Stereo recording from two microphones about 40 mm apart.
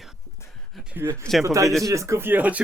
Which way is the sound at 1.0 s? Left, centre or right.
Right.